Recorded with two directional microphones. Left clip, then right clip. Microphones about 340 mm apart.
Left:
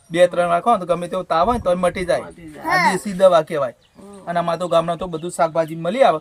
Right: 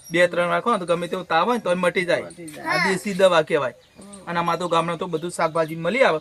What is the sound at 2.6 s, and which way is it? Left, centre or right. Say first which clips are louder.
Speech: left 5 dB; centre.